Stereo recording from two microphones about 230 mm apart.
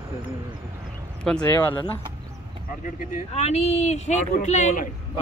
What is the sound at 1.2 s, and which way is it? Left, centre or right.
Speech, centre.